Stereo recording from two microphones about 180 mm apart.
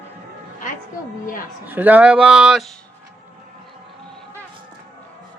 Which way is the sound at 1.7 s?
10° right (ahead or behind).